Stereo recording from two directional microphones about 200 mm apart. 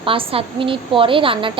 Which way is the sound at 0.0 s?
25° right (ahead or behind).